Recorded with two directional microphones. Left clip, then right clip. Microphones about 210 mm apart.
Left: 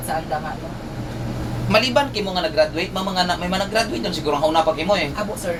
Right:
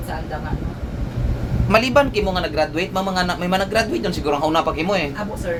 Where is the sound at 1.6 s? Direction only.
35° right (ahead or behind).